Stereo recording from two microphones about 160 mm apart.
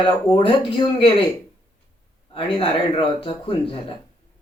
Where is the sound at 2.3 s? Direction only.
35° left (ahead or behind).